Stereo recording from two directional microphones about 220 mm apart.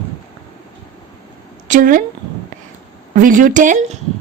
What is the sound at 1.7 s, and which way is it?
Speech, 35° right (ahead or behind).